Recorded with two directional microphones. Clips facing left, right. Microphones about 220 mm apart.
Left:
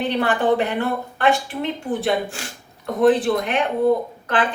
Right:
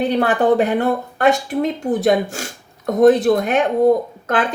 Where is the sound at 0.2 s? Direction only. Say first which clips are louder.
Right 3 dB; 40° right (ahead or behind).